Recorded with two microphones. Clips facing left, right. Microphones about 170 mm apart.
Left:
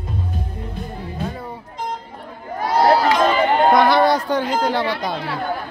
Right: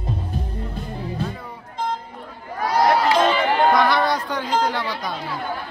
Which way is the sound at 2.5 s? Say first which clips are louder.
Left 3 dB; 25° left (ahead or behind).